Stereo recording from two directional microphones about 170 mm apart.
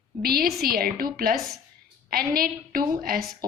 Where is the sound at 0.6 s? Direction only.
60° right (ahead or behind).